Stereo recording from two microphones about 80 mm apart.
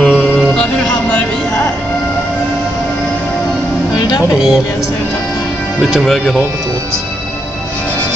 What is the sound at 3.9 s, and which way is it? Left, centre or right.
Music, left.